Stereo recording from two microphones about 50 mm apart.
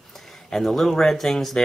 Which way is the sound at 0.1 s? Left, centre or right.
Centre.